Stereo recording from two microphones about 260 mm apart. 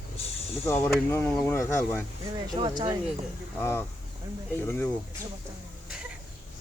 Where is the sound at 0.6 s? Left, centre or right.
Centre.